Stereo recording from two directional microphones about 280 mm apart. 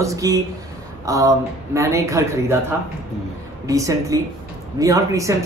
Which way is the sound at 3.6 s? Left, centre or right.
Centre.